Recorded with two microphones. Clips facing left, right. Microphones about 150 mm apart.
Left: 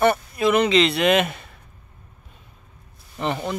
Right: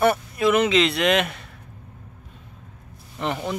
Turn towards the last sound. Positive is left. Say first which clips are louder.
# left 1 dB
turn(degrees=0)  # may be behind; listen again after turning